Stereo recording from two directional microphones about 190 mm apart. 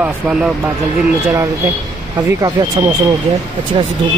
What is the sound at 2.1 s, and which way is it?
Speech, 25° right (ahead or behind).